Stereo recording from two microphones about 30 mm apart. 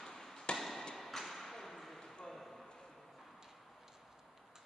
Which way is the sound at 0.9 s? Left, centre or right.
Centre.